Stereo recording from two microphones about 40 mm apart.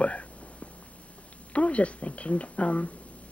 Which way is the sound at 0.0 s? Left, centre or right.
Left.